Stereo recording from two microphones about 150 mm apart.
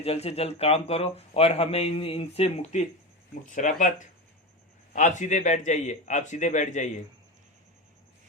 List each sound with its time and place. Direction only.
0.0 s speech: 40° left (ahead or behind)
3.5 s speech: 60° left (ahead or behind)
4.9 s speech: 55° left (ahead or behind)